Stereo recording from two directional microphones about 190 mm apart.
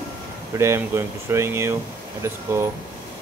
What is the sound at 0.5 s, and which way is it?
Speech, 15° right (ahead or behind).